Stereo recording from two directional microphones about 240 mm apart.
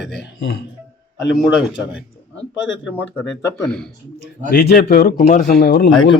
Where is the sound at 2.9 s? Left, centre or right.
Centre.